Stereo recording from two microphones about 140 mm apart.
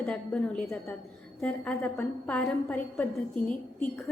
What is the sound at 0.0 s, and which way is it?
A woman's voice, 5° left (ahead or behind).